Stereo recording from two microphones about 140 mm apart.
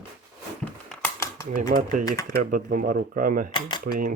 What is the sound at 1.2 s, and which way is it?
Typewriter, 25° left (ahead or behind).